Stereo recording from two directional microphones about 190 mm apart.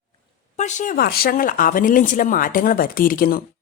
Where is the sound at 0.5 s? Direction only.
40° left (ahead or behind).